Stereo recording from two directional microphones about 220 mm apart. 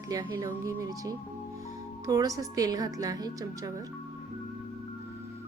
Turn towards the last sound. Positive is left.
turn(degrees=-15)  # may be behind; listen again after turning